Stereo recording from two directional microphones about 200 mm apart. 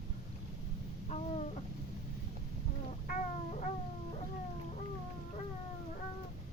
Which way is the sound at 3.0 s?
40° left (ahead or behind).